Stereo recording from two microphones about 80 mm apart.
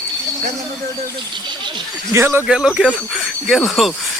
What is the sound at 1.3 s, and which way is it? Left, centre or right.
Speech, right.